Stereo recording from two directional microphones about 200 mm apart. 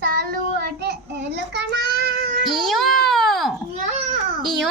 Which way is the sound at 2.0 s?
55° right (ahead or behind).